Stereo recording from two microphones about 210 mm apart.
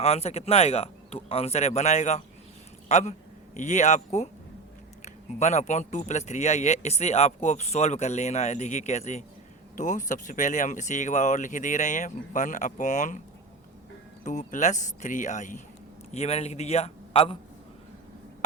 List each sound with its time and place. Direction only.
0.0 s a man's voice: 30° left (ahead or behind)
14.3 s a man's voice: 35° left (ahead or behind)